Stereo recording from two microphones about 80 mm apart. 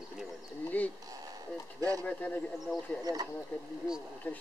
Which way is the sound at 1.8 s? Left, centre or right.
Right.